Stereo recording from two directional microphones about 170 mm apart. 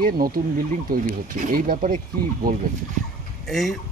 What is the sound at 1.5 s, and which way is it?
Speech, 55° right (ahead or behind).